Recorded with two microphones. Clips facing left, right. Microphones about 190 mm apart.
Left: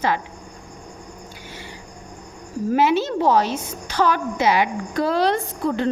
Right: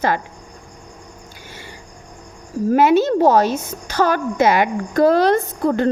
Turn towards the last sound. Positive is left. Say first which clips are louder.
# right 4 dB
turn(degrees=-50)  # may be behind; listen again after turning